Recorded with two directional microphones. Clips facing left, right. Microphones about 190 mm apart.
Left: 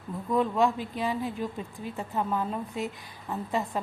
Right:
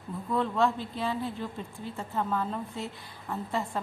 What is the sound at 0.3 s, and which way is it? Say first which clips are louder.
A woman's voice: left 2 dB; 15° left (ahead or behind).